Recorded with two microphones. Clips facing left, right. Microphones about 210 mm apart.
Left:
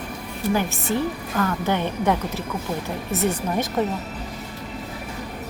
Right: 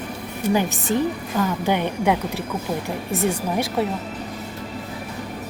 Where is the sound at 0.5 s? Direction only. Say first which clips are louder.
Right 3 dB; 15° right (ahead or behind).